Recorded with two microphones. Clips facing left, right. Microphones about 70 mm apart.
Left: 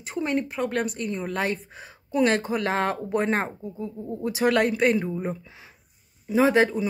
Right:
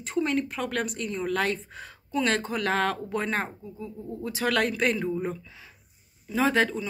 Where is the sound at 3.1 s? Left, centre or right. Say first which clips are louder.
Left 4 dB; left.